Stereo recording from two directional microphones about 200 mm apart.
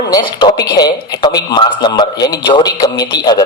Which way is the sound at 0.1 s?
20° left (ahead or behind).